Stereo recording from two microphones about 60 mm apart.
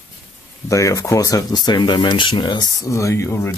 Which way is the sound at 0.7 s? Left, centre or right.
Left.